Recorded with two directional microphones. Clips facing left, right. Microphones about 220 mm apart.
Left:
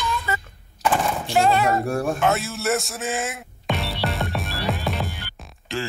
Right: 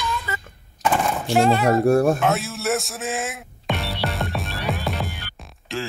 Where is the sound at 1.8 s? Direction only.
40° right (ahead or behind).